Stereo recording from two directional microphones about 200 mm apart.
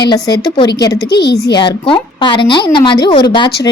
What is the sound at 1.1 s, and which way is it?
Speech, 55° left (ahead or behind).